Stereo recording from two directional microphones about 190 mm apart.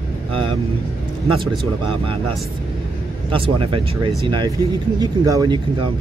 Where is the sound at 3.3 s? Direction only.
25° right (ahead or behind).